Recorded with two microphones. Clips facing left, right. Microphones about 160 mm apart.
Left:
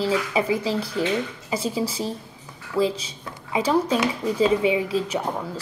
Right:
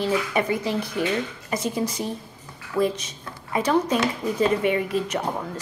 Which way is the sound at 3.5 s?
10° left (ahead or behind).